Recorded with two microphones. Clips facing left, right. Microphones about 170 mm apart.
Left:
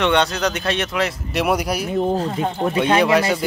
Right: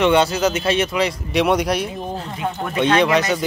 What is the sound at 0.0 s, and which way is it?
Speech, centre (ahead or behind).